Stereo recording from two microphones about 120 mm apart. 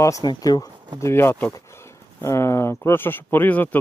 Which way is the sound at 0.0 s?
30° left (ahead or behind).